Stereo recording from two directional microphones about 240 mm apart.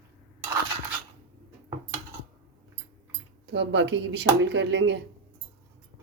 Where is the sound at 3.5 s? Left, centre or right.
Right.